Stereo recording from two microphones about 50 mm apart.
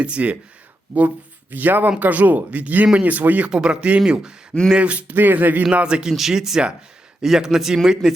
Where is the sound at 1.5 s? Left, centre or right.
Right.